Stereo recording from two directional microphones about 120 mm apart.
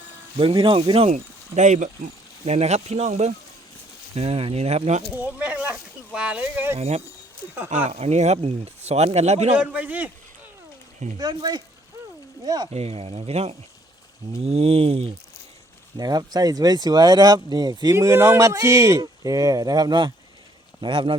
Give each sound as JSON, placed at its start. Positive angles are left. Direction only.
{"t": 0.3, "sound": "speech", "side_deg": -45}
{"t": 1.1, "sound": "speech", "side_deg": -80}
{"t": 2.4, "sound": "speech", "side_deg": -60}
{"t": 5.1, "sound": "speech", "side_deg": -10}
{"t": 6.7, "sound": "speech", "side_deg": -65}
{"t": 9.6, "sound": "speech", "side_deg": -10}
{"t": 11.2, "sound": "speech", "side_deg": -35}
{"t": 12.7, "sound": "speech", "side_deg": -60}
{"t": 16.0, "sound": "speech", "side_deg": -35}
{"t": 17.9, "sound": "speech", "side_deg": -20}